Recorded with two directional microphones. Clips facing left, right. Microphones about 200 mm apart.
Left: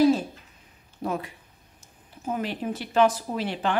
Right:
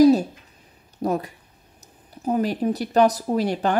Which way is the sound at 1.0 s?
40° right (ahead or behind).